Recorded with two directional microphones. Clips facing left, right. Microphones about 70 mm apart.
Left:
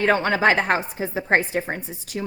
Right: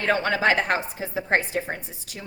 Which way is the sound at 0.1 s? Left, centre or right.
Left.